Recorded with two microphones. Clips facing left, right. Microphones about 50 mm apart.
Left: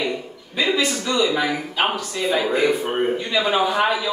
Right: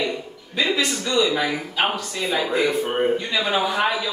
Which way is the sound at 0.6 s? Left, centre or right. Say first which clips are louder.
Left 1 dB; centre.